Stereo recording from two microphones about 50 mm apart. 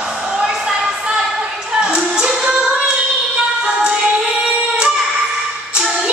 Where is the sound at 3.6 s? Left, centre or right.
Right.